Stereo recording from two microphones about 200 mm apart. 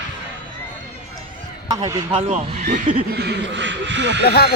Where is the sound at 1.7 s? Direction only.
20° right (ahead or behind).